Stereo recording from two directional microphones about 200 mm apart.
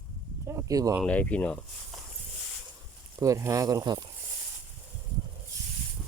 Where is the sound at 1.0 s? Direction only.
5° left (ahead or behind).